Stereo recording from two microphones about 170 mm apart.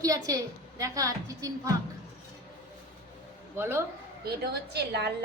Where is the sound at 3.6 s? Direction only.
15° right (ahead or behind).